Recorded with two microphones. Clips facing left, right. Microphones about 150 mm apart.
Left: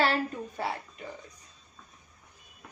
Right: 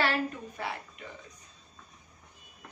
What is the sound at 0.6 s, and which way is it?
Speech, 30° left (ahead or behind).